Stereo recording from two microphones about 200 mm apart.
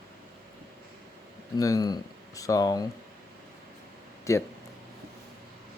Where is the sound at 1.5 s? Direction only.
15° left (ahead or behind).